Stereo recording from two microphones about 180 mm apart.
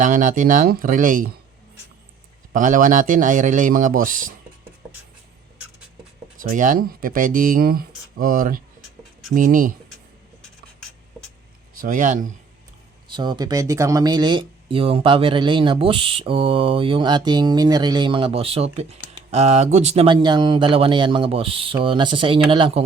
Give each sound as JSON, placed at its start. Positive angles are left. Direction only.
{"t": 0.0, "sound": "speech", "side_deg": -45}
{"t": 2.5, "sound": "speech", "side_deg": -50}
{"t": 6.4, "sound": "speech", "side_deg": -50}
{"t": 11.8, "sound": "speech", "side_deg": -45}
{"t": 13.1, "sound": "speech", "side_deg": -25}